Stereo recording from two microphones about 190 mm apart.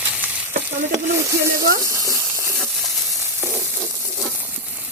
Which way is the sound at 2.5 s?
Centre (ahead or behind).